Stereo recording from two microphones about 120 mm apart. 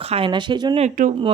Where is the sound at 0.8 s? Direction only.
80° right.